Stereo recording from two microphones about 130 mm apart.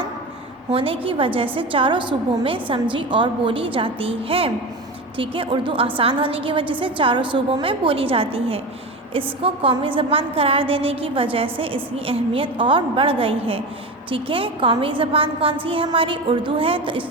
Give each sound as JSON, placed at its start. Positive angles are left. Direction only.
{"t": 0.7, "sound": "a woman's voice", "side_deg": -45}